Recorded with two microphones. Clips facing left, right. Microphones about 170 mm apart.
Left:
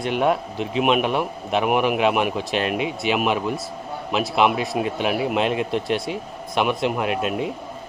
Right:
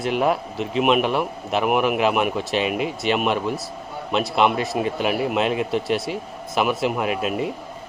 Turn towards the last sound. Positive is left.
turn(degrees=0)  # may be behind; listen again after turning